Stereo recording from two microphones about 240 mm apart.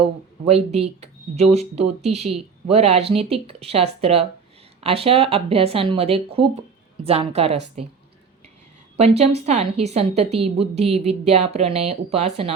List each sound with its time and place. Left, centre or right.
0.0 s a woman's voice: right
9.0 s a woman's voice: right